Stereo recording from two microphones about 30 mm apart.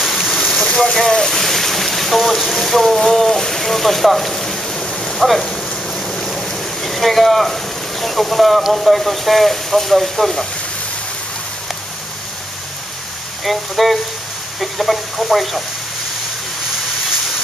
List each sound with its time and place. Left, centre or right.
0.2 s rain: centre
0.7 s rain: left
0.9 s speech: centre
1.4 s boat: centre
2.5 s speech: centre
5.5 s a sound: centre
8.7 s speech: centre
13.4 s speech: centre